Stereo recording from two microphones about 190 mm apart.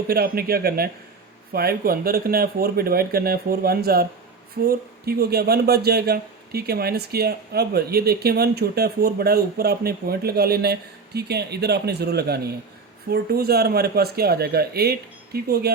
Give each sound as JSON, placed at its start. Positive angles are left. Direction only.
{"t": 0.1, "sound": "speech", "side_deg": -55}